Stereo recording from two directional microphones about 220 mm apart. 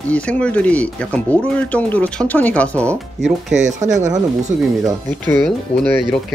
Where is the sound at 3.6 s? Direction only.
35° right (ahead or behind).